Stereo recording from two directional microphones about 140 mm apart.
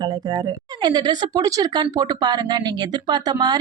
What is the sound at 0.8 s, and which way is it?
Speech, 30° right (ahead or behind).